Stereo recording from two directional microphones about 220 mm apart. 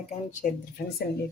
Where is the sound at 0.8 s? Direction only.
45° left (ahead or behind).